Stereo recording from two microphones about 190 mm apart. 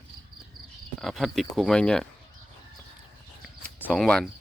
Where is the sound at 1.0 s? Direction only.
Centre (ahead or behind).